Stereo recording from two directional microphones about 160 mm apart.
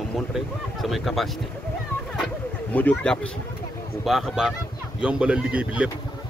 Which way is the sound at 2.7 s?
10° left (ahead or behind).